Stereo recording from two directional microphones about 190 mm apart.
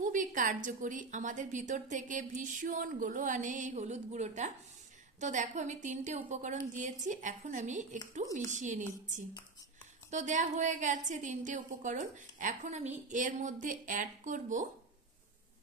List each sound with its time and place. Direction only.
0.0 s a woman's voice: 45° right (ahead or behind)
10.1 s a woman's voice: 40° right (ahead or behind)